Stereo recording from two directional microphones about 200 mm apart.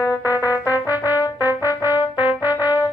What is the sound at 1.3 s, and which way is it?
Music, 10° right (ahead or behind).